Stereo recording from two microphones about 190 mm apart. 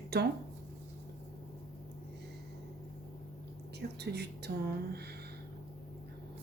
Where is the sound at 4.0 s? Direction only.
60° right (ahead or behind).